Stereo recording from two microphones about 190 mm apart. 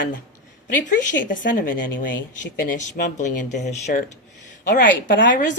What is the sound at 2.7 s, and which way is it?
Speech, 45° left (ahead or behind).